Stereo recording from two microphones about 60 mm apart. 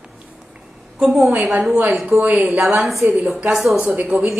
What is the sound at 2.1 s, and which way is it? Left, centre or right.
Speech, right.